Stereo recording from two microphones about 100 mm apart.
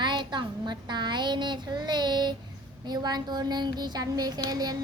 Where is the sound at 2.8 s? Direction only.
45° right (ahead or behind).